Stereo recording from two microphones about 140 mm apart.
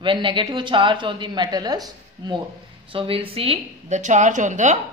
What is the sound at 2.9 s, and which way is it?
Speech, 40° right (ahead or behind).